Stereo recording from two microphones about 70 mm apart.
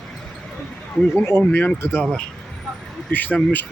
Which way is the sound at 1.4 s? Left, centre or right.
Left.